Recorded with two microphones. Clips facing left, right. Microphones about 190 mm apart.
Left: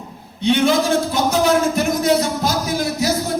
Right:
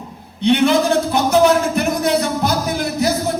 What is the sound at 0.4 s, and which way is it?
Speech, 60° right (ahead or behind).